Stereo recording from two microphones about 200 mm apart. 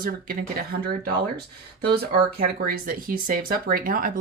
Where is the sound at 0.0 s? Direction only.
45° right (ahead or behind).